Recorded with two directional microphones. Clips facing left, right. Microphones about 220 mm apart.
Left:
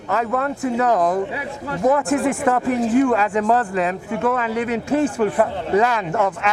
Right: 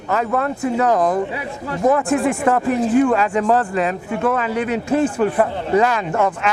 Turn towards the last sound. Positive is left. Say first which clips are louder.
# right 1 dB
turn(degrees=-20)  # may be behind; listen again after turning